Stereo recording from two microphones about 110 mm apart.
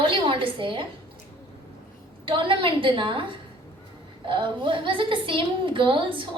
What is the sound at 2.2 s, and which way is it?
A woman's voice, 50° right (ahead or behind).